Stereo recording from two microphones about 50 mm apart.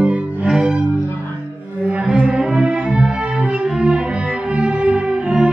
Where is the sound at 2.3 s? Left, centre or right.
Centre.